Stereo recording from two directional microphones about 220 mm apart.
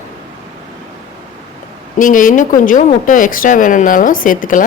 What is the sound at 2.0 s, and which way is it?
A woman's voice, 35° left (ahead or behind).